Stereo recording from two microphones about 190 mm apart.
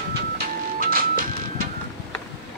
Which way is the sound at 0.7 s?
50° right (ahead or behind).